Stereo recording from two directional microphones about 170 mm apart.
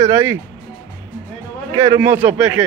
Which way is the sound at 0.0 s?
15° right (ahead or behind).